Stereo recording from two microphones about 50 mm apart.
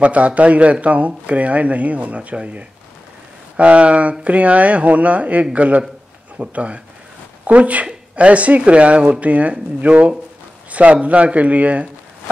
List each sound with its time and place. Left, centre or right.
0.0 s speech: right